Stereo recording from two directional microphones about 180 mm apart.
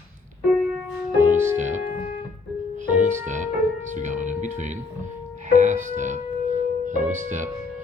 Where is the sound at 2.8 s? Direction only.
45° right (ahead or behind).